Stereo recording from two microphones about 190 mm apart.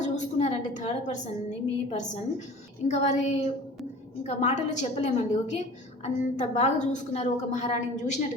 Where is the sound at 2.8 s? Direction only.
40° left (ahead or behind).